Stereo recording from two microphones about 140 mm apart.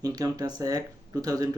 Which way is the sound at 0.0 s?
25° right (ahead or behind).